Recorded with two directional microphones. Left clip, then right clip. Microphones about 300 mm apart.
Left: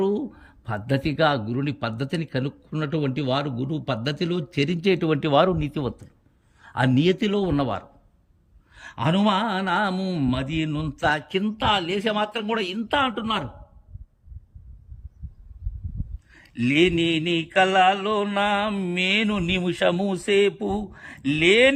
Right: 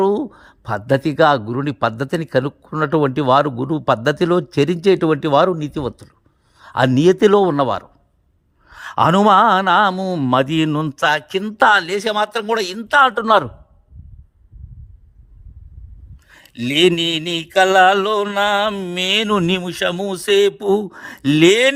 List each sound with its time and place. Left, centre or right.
0.4 s a man's voice: centre
2.8 s mantra: centre
4.9 s a man's voice: centre
6.7 s mantra: centre
16.3 s mantra: centre